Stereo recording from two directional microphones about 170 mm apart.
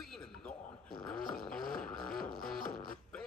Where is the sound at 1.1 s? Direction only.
5° left (ahead or behind).